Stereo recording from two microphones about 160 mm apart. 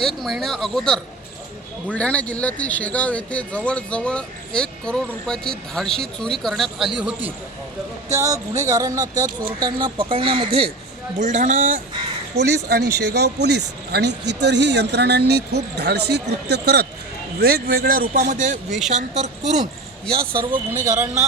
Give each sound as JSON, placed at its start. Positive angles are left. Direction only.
{"t": 0.0, "sound": "speech", "side_deg": 0}
{"t": 8.1, "sound": "speech", "side_deg": -20}
{"t": 11.2, "sound": "speech", "side_deg": -50}
{"t": 12.4, "sound": "speech", "side_deg": -90}
{"t": 17.4, "sound": "speech", "side_deg": -75}